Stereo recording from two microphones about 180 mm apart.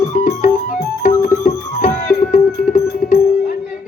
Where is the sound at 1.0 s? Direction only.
40° left (ahead or behind).